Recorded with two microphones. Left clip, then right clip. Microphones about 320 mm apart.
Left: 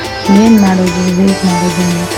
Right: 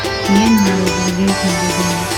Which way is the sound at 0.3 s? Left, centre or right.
Centre.